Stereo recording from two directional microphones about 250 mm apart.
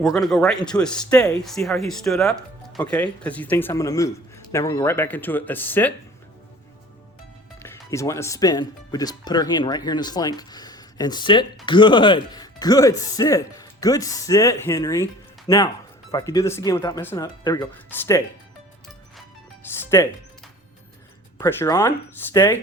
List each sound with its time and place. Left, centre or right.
0.0 s speech: centre
7.6 s speech: centre
19.8 s speech: centre
21.3 s speech: centre